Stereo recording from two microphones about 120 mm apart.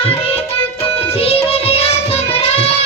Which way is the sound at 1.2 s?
55° left (ahead or behind).